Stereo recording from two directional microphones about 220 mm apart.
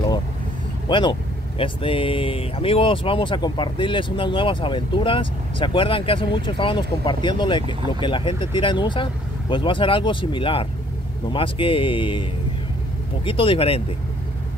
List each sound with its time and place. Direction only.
0.8 s speech: 20° left (ahead or behind)